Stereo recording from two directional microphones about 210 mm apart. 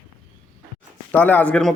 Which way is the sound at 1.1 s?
10° left (ahead or behind).